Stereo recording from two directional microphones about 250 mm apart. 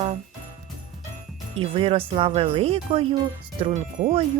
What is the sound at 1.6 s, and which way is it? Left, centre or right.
Speech, right.